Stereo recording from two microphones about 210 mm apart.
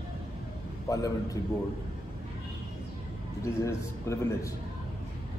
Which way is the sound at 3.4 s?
15° left (ahead or behind).